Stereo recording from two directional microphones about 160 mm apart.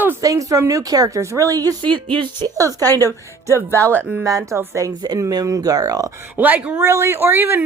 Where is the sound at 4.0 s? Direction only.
10° right (ahead or behind).